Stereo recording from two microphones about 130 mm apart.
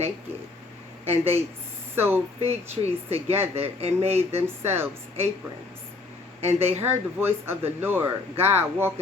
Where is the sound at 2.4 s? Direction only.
50° right (ahead or behind).